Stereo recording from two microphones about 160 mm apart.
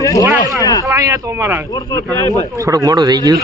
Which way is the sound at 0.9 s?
20° right (ahead or behind).